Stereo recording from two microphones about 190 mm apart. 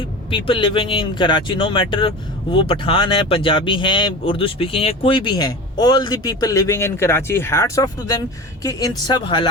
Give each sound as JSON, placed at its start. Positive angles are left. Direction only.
{"t": 0.3, "sound": "speech", "side_deg": 25}